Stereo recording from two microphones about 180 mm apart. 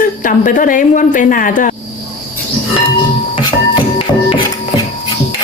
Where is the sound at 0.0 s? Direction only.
50° left (ahead or behind).